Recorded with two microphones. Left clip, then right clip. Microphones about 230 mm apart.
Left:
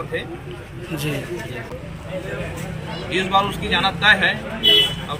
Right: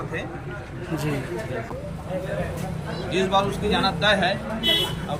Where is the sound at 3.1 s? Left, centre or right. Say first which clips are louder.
Left 3 dB; centre.